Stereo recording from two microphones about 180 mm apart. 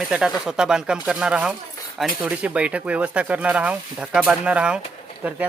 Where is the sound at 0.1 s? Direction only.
5° right (ahead or behind).